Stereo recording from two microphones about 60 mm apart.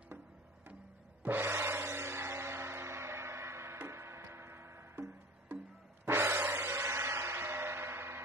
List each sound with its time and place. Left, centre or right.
1.2 s music: right